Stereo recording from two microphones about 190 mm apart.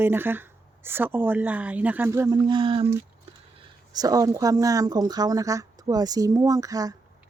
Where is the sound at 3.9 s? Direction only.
20° right (ahead or behind).